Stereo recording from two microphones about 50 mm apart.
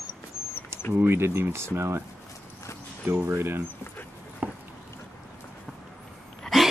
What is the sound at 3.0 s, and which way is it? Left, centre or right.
Speech, right.